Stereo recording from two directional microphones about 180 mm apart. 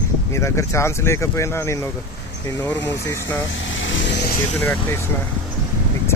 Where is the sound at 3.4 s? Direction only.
90° left.